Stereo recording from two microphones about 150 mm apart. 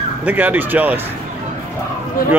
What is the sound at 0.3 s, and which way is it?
Speech, 10° right (ahead or behind).